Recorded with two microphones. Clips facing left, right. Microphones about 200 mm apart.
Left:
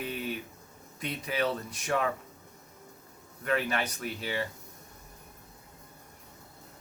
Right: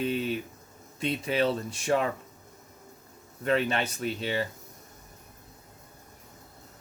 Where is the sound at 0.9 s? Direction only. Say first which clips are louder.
Right 5 dB; 25° right (ahead or behind).